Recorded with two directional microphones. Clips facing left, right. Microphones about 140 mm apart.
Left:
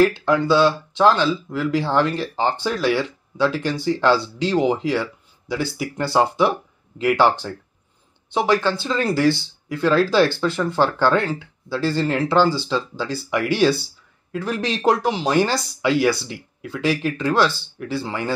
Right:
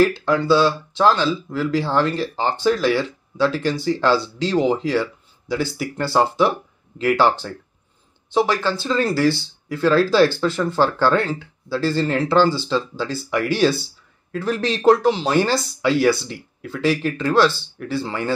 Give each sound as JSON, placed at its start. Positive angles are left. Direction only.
{"t": 0.3, "sound": "speech", "side_deg": 15}
{"t": 8.5, "sound": "speech", "side_deg": 15}